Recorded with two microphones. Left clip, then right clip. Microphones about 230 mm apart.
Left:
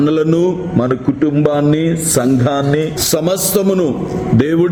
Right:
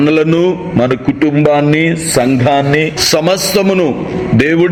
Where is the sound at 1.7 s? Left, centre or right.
Centre.